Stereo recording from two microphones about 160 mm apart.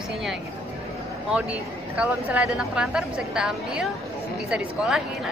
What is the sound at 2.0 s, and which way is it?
A woman's voice, 5° right (ahead or behind).